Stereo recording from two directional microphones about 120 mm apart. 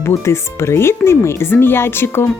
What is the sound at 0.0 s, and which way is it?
Speech, 25° left (ahead or behind).